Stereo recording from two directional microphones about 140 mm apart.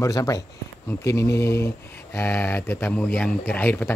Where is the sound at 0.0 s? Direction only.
25° left (ahead or behind).